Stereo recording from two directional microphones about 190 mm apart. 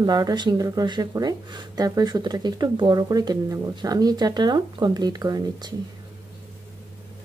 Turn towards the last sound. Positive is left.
turn(degrees=-20)  # may be behind; listen again after turning